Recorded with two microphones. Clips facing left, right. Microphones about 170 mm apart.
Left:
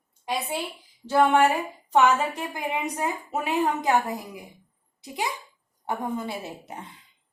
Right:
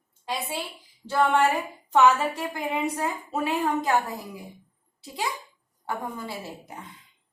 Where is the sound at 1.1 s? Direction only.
15° left (ahead or behind).